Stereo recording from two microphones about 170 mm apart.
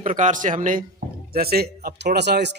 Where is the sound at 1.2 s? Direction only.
65° right (ahead or behind); by 2.5 s 85° right.